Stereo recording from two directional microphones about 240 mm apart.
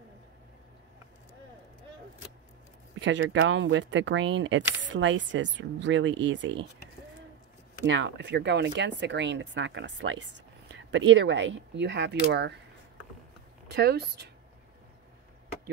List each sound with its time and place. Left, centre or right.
3.0 s speech: right
7.8 s speech: right
13.7 s speech: right